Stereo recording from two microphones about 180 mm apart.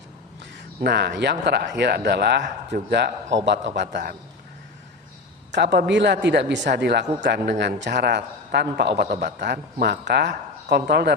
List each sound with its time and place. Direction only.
0.9 s a woman's voice: 65° right (ahead or behind)
3.8 s a woman's voice: 65° right (ahead or behind)
5.5 s a man's voice: 70° right (ahead or behind)